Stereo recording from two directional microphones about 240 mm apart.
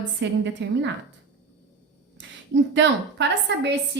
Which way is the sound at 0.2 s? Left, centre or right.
Right.